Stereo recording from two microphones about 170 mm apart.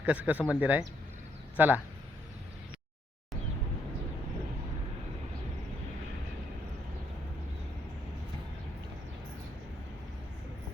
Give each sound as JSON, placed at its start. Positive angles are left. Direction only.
{"t": 0.0, "sound": "speech", "side_deg": -10}